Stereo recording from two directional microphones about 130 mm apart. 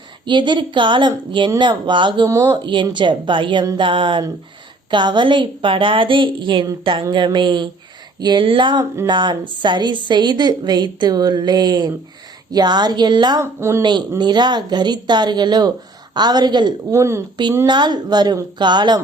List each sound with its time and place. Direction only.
0.3 s a woman's voice: 35° right (ahead or behind)
13.4 s speech: 20° right (ahead or behind)
14.2 s a woman's voice: 35° right (ahead or behind)
17.0 s speech: 20° right (ahead or behind)
17.7 s a woman's voice: 35° right (ahead or behind)